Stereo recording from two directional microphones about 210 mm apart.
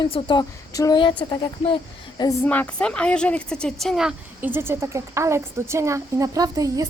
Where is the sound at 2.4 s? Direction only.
5° left (ahead or behind).